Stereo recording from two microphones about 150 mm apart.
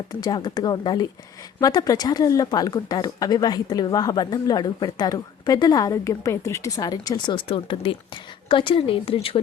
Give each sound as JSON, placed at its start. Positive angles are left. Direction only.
{"t": 0.1, "sound": "speech", "side_deg": 25}